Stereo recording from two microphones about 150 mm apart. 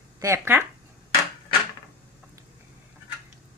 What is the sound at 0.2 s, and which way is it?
Speech, 15° right (ahead or behind).